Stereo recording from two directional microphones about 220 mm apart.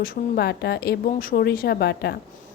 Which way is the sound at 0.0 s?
45° left (ahead or behind).